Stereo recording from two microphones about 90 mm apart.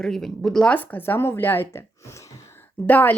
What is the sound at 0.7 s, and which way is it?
Speech, 20° left (ahead or behind).